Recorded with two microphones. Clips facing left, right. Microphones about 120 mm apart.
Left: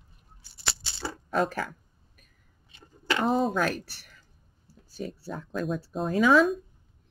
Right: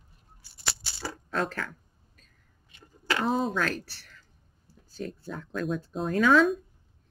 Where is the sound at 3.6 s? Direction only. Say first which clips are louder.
Left 2 dB; 15° left (ahead or behind).